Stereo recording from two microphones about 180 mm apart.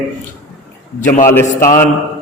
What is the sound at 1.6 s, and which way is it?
Speech, 50° left (ahead or behind).